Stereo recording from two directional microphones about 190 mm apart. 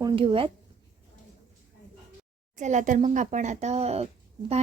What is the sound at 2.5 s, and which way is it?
Speech, 40° right (ahead or behind).